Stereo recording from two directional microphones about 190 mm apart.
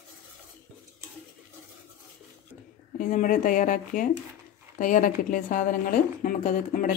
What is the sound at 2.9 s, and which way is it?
A woman's voice, 45° left (ahead or behind).